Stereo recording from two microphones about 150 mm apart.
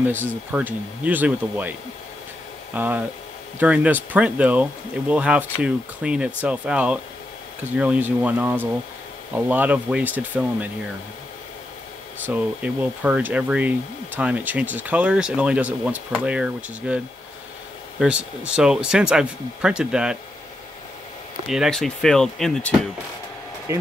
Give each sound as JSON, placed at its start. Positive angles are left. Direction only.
{"t": 0.0, "sound": "speech", "side_deg": -15}
{"t": 12.3, "sound": "speech", "side_deg": -10}
{"t": 21.5, "sound": "speech", "side_deg": 0}
{"t": 23.7, "sound": "speech", "side_deg": -20}